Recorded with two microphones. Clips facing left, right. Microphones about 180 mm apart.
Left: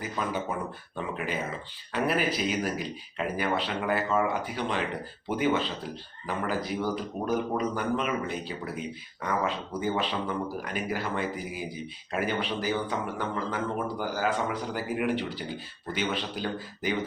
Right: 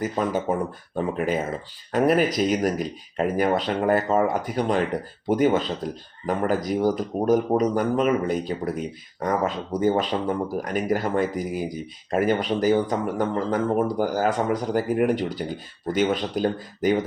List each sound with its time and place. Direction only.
0.0 s speech: 45° right (ahead or behind)